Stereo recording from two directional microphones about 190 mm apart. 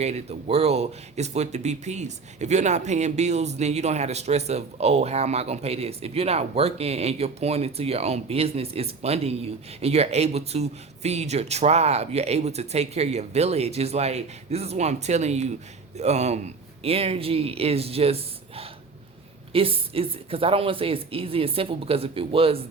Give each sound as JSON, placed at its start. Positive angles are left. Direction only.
{"t": 0.0, "sound": "speech", "side_deg": -35}